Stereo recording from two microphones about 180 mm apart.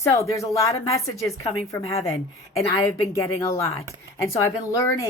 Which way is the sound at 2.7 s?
15° left (ahead or behind).